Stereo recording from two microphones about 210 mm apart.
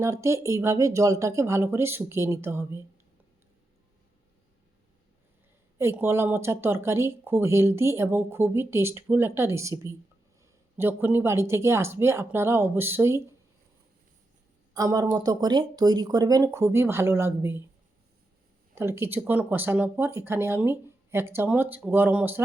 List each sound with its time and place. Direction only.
0.0 s speech: 15° right (ahead or behind)
5.7 s speech: 10° right (ahead or behind)
14.7 s speech: 15° right (ahead or behind)
18.7 s speech: 10° right (ahead or behind)